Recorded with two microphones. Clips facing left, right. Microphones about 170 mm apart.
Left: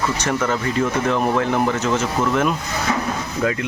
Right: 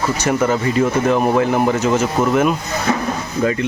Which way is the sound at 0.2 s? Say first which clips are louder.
Right 4 dB; 10° right (ahead or behind).